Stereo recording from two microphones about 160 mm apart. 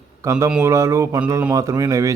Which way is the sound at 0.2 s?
20° right (ahead or behind).